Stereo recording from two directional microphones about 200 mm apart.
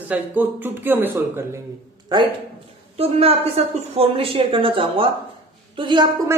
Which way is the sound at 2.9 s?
30° right (ahead or behind).